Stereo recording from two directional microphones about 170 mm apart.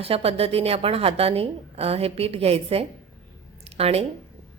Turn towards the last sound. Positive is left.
turn(degrees=-35)  # may be behind; listen again after turning